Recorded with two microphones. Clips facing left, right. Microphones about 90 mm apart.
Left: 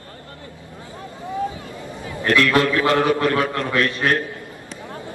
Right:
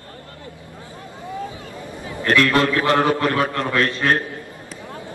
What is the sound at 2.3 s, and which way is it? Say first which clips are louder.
A man's voice: even; 35° right (ahead or behind).